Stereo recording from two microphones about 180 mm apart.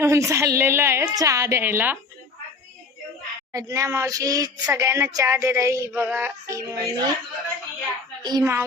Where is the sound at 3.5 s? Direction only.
15° right (ahead or behind).